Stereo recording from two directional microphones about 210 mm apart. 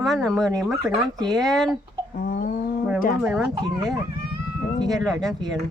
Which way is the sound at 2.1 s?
40° left (ahead or behind).